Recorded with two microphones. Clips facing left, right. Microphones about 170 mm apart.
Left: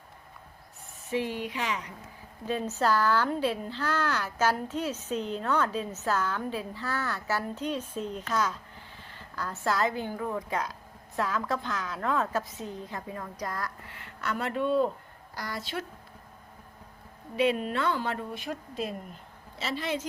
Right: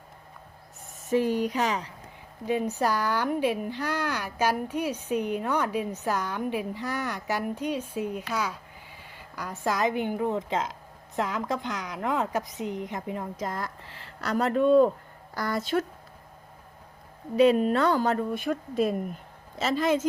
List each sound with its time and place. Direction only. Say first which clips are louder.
1.1 s speech: right 7 dB; 45° right (ahead or behind)
2.5 s a woman's voice: right 1 dB; 15° right (ahead or behind); by 15.9 s 45° right (ahead or behind)
17.3 s speech: right 7 dB; 40° right (ahead or behind)